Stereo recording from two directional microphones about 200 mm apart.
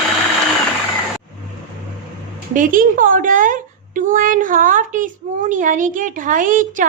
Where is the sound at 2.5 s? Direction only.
40° right (ahead or behind).